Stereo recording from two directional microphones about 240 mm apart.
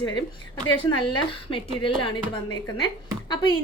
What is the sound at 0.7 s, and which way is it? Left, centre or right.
A woman's voice, left.